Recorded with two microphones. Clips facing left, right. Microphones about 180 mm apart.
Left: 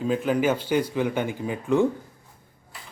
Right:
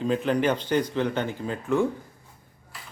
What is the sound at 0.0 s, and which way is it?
A man's voice, 5° left (ahead or behind).